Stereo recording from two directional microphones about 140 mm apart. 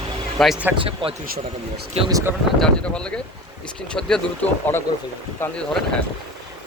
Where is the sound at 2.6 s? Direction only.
5° left (ahead or behind).